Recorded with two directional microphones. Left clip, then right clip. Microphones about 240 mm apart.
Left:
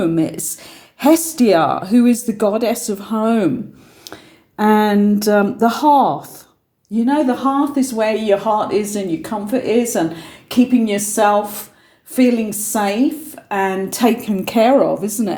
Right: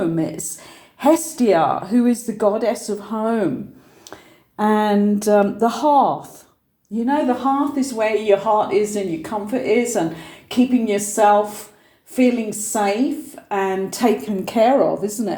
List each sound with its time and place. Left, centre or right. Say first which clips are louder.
0.2 s speech: left 4 dB; left
6.9 s speech: left 3 dB; left